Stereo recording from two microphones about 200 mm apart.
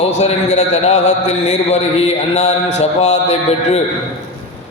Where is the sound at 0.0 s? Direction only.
30° left (ahead or behind).